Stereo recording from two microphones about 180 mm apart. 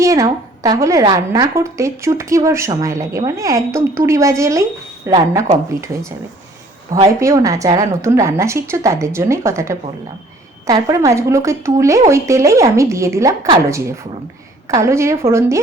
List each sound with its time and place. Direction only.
0.0 s a woman's voice: 20° right (ahead or behind)